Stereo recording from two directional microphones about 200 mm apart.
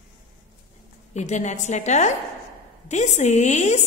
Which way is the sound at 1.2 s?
35° left (ahead or behind).